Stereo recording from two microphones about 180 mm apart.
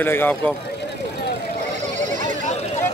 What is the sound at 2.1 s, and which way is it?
Sheep, 45° right (ahead or behind).